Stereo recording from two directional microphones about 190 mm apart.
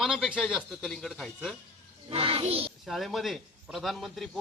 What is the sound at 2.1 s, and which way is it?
Speech, 30° right (ahead or behind).